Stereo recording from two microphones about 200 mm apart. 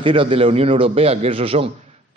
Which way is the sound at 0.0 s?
25° right (ahead or behind).